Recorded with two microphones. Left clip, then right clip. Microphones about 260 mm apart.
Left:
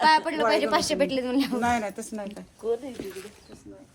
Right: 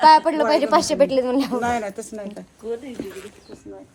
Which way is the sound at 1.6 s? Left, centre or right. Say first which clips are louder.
Right 3 dB; centre.